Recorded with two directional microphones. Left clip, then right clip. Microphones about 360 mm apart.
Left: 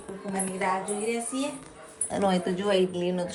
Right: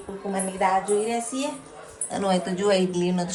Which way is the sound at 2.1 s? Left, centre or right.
Centre.